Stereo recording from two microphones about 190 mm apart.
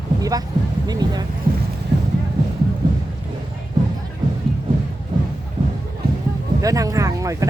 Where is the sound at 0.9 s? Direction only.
20° right (ahead or behind).